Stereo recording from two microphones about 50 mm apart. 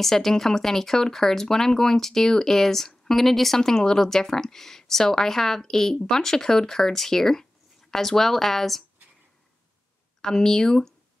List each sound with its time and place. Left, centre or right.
0.0 s speech: centre
10.2 s speech: centre